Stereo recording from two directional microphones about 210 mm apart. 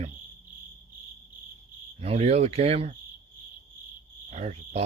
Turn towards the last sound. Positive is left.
turn(degrees=-30)  # may be behind; listen again after turning